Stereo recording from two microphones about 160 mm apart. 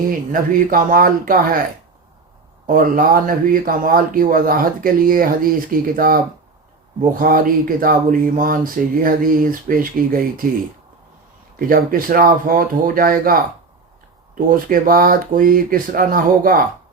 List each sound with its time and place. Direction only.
0.1 s speech: 60° right (ahead or behind)
2.6 s speech: 60° right (ahead or behind)
7.2 s speech: 60° right (ahead or behind)
11.7 s speech: 60° right (ahead or behind)